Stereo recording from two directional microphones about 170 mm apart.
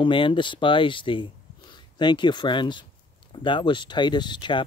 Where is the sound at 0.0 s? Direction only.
30° left (ahead or behind).